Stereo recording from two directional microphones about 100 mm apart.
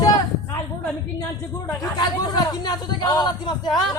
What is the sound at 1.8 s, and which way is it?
Speech, 45° left (ahead or behind).